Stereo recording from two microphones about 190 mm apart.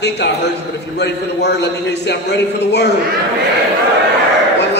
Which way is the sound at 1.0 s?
60° left (ahead or behind).